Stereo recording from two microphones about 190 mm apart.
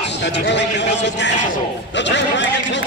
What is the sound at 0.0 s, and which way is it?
A man's voice, 65° left (ahead or behind).